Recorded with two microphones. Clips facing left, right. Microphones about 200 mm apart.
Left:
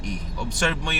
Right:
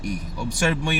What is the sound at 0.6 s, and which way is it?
Speech, 10° right (ahead or behind).